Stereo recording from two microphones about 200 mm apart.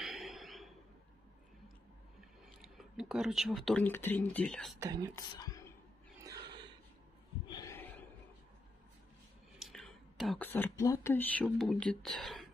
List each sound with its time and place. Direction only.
0.0 s a sound: centre (ahead or behind)
2.8 s speech: 5° right (ahead or behind)
4.7 s speech: 20° right (ahead or behind)
5.1 s speech: 15° left (ahead or behind)
6.2 s a sound: 20° right (ahead or behind)
7.4 s gasp: 20° left (ahead or behind)
9.6 s speech: centre (ahead or behind)